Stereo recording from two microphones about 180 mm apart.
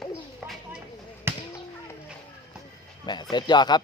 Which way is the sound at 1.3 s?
15° right (ahead or behind).